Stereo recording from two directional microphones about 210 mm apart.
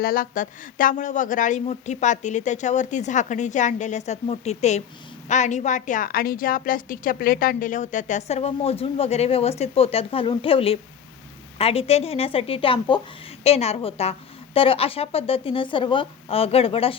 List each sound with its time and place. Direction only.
0.0 s a woman's voice: 45° left (ahead or behind); by 17.0 s 25° left (ahead or behind)